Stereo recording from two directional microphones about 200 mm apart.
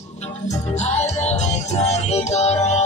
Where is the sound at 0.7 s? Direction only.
35° left (ahead or behind).